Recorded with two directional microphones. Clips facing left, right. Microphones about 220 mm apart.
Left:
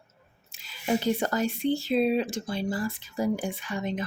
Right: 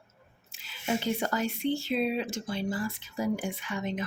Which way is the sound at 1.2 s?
35° left (ahead or behind).